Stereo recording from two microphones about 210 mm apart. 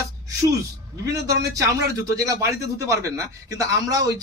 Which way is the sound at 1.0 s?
15° right (ahead or behind).